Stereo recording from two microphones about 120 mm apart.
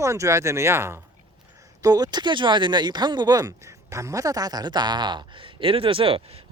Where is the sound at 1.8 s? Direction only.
35° right (ahead or behind).